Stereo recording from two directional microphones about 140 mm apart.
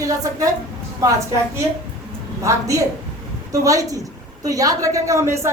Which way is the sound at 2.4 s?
25° right (ahead or behind).